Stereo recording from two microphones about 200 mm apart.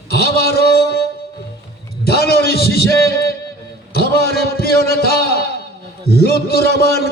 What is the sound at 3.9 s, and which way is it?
A man's voice, 50° left (ahead or behind).